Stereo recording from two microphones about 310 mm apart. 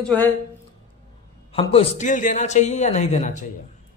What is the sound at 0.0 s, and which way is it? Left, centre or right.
Speech, centre.